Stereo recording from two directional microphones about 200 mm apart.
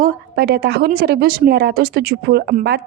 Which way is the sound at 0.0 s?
50° right (ahead or behind).